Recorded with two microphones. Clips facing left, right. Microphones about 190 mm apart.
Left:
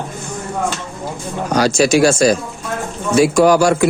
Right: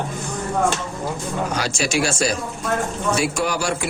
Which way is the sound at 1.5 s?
40° left (ahead or behind).